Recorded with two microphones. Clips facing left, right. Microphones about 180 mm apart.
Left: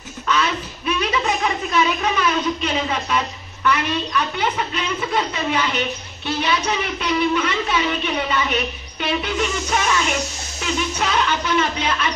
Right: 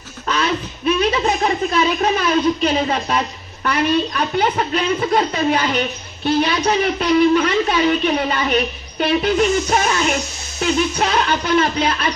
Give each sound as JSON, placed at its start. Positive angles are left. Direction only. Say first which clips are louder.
{"t": 0.3, "sound": "speech", "louder": "right 1 dB", "side_deg": -35}